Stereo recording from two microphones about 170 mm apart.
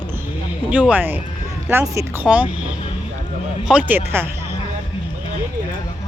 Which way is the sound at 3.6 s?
10° right (ahead or behind).